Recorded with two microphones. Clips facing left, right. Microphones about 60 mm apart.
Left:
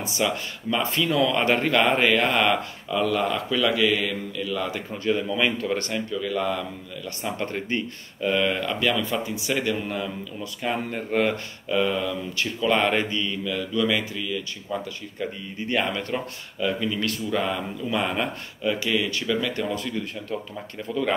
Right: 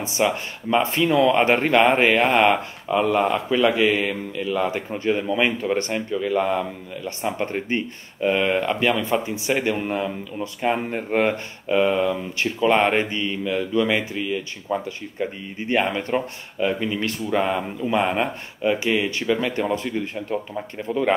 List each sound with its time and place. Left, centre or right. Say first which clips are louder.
0.0 s speech: right 4 dB; right